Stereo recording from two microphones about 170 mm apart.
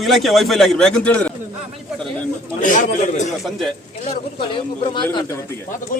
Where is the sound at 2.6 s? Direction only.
50° left (ahead or behind).